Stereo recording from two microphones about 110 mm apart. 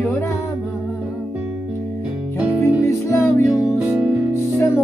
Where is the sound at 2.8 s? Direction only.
25° left (ahead or behind).